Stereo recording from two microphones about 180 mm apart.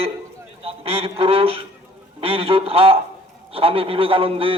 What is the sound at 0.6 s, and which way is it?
A man's voice, 30° right (ahead or behind).